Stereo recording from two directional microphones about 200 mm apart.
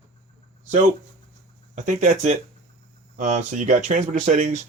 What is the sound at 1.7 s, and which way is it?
Speech, 35° right (ahead or behind).